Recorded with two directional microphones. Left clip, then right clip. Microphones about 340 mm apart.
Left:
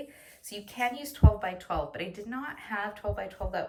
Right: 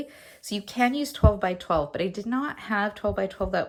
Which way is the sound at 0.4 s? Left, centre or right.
Centre.